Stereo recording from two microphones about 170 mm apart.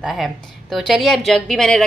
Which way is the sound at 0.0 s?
Centre (ahead or behind).